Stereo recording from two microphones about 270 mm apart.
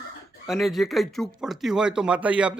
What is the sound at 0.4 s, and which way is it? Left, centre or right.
A man's voice, centre.